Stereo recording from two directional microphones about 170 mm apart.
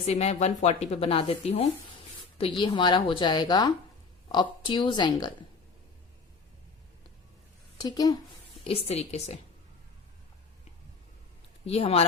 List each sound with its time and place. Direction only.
0.0 s a woman's voice: 40° left (ahead or behind)
7.8 s a woman's voice: 25° left (ahead or behind)
8.6 s speech: 35° left (ahead or behind)
11.6 s speech: 35° left (ahead or behind)